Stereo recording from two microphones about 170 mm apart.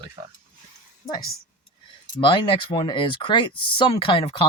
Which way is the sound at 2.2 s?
30° left (ahead or behind).